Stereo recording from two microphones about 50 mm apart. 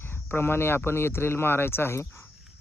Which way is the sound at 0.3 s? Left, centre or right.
Left.